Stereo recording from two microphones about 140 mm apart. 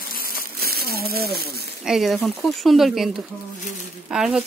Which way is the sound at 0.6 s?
90° right.